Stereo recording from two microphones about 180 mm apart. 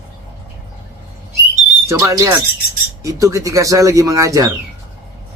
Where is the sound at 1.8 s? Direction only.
15° right (ahead or behind).